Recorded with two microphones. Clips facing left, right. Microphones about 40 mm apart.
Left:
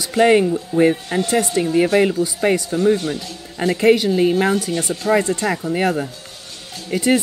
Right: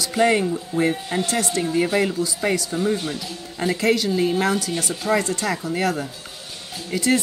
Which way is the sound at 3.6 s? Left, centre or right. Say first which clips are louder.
Left 6 dB; centre.